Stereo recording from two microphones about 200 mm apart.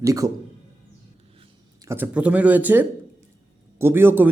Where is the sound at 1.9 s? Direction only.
10° right (ahead or behind).